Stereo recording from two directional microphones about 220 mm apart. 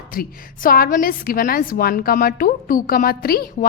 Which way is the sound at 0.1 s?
40° left (ahead or behind).